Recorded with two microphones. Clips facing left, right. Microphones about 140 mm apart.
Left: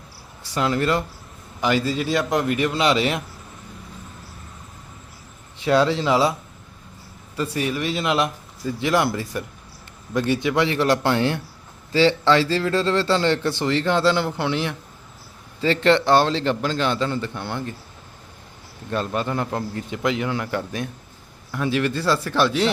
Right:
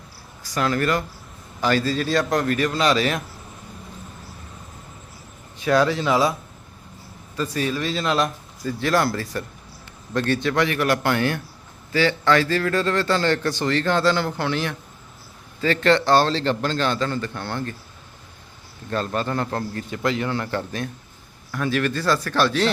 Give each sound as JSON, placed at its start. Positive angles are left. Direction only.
{"t": 0.5, "sound": "speech", "side_deg": 25}
{"t": 5.6, "sound": "speech", "side_deg": 25}
{"t": 7.3, "sound": "a man's voice", "side_deg": 25}
{"t": 18.9, "sound": "a man's voice", "side_deg": 15}